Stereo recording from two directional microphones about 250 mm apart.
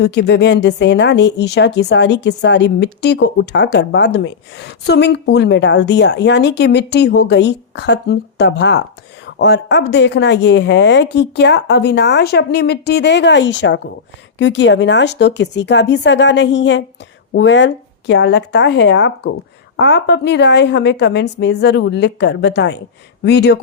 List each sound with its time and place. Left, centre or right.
0.0 s a woman's voice: left